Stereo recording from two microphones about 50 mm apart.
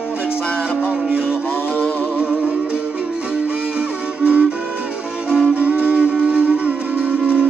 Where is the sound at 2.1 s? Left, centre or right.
Centre.